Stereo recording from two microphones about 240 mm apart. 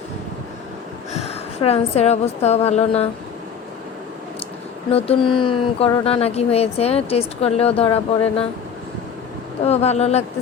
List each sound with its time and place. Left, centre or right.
1.6 s speech: left
4.9 s speech: left
9.6 s speech: left